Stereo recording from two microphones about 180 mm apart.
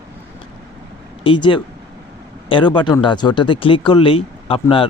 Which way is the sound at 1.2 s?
25° left (ahead or behind).